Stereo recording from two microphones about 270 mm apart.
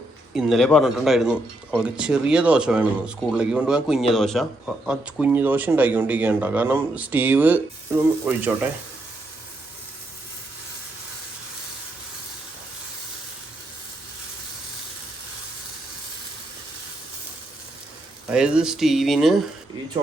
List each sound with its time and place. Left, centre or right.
0.3 s speech: centre
18.3 s speech: centre